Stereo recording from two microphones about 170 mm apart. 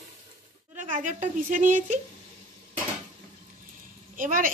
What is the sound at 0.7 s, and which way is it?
A woman's voice, 50° right (ahead or behind).